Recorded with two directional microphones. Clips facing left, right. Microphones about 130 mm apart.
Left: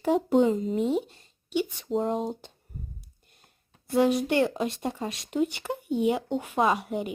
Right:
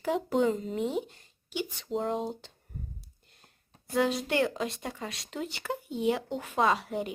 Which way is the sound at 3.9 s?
20° left (ahead or behind).